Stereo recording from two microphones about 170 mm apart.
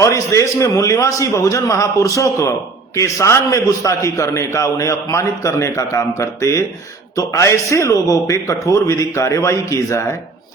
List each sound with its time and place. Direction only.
0.0 s a man's voice: 20° left (ahead or behind)